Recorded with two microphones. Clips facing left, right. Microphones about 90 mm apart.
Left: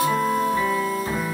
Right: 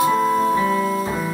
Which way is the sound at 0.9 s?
30° right (ahead or behind).